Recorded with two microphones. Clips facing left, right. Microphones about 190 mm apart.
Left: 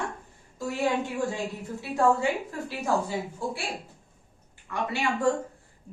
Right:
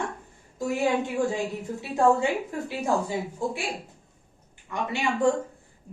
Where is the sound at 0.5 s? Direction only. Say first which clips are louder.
Right 2 dB; 20° right (ahead or behind).